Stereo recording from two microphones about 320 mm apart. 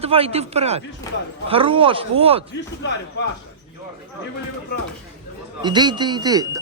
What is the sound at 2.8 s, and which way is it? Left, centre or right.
Speech, left.